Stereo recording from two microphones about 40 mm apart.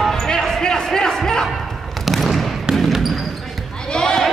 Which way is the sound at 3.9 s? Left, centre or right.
Centre.